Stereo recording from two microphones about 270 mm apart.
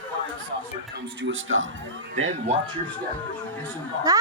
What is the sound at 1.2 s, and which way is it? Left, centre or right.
Speech, right.